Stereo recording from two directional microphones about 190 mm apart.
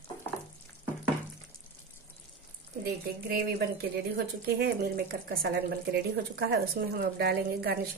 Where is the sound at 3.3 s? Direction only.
55° right (ahead or behind).